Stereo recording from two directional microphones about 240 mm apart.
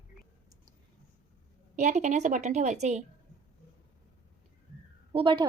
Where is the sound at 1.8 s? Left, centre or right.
Right.